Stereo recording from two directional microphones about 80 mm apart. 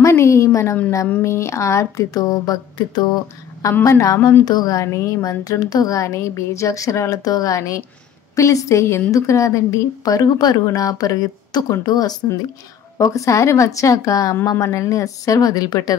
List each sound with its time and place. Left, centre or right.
0.0 s a woman's voice: left
3.9 s a woman's voice: left
4.5 s a woman's voice: left
12.9 s a woman's voice: left